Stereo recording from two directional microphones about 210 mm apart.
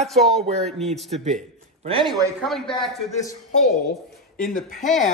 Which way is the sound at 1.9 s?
25° right (ahead or behind).